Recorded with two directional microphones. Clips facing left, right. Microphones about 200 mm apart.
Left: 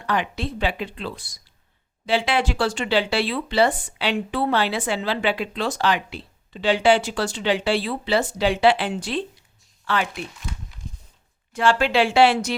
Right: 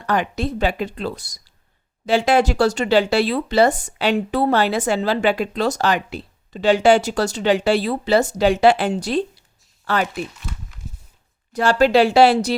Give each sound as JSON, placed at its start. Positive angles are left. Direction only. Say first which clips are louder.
{"t": 0.0, "sound": "speech", "louder": "right 4 dB", "side_deg": -45}
{"t": 10.8, "sound": "walk", "louder": "right 1 dB", "side_deg": -5}
{"t": 11.5, "sound": "speech", "louder": "right 4 dB", "side_deg": -40}